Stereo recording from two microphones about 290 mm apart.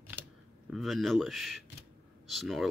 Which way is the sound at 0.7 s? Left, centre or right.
Centre.